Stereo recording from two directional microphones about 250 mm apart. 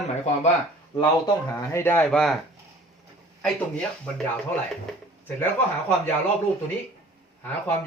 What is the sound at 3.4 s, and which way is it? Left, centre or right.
Speech, centre.